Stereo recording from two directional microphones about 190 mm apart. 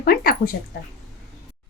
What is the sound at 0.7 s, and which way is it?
Speech, 60° left (ahead or behind).